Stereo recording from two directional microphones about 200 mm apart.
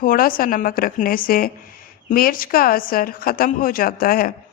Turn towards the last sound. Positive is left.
turn(degrees=45)  # may be behind; listen again after turning